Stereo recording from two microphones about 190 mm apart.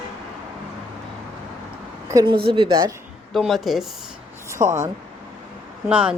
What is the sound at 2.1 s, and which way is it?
Speech, 25° right (ahead or behind).